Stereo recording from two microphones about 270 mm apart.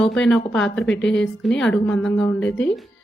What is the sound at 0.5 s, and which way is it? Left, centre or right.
Speech, centre.